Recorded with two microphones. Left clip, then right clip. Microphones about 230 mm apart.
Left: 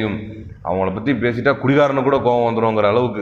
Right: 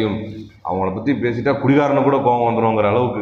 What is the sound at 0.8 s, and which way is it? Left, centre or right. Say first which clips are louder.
A man's voice: even; left.